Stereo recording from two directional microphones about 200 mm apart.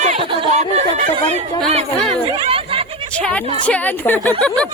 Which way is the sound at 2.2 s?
30° right (ahead or behind).